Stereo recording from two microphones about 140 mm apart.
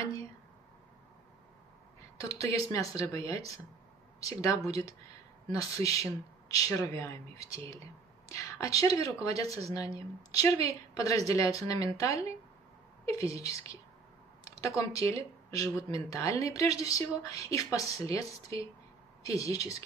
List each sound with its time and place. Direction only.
2.1 s speech: 25° left (ahead or behind)